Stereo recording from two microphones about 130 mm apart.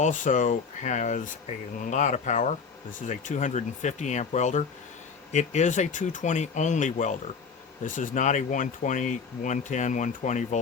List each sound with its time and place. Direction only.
0.0 s speech: 75° left (ahead or behind)
7.9 s speech: 85° left; by 10.6 s 70° left (ahead or behind)